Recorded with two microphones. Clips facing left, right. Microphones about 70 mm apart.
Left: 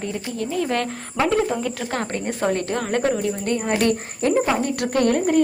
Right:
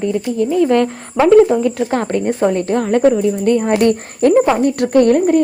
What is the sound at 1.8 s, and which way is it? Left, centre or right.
Speech, right.